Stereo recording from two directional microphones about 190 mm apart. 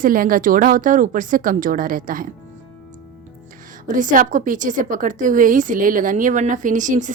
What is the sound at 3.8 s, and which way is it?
A woman's voice, 45° right (ahead or behind).